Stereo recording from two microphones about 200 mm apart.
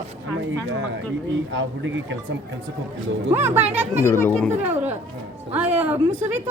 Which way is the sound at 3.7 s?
10° right (ahead or behind).